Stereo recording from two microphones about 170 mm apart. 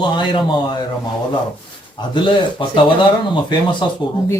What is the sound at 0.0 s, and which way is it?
Speech, 25° left (ahead or behind).